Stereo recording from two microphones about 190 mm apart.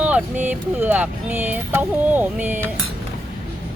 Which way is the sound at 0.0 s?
10° right (ahead or behind).